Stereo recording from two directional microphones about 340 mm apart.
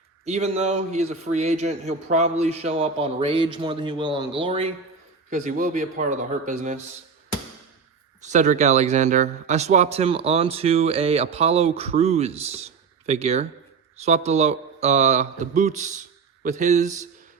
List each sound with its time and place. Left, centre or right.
0.3 s a man's voice: centre
8.2 s a man's voice: right